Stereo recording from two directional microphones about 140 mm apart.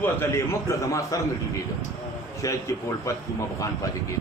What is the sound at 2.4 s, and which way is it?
Speech, 20° left (ahead or behind).